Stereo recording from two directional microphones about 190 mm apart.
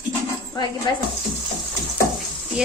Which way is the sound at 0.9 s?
20° left (ahead or behind).